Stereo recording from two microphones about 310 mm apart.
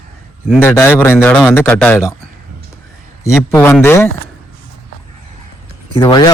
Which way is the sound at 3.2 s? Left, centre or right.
Centre.